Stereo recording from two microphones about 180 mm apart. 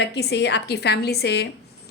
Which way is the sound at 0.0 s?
70° left (ahead or behind).